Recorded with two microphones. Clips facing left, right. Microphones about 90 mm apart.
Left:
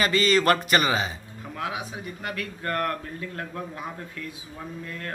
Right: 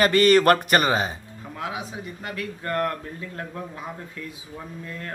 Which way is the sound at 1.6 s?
25° right (ahead or behind).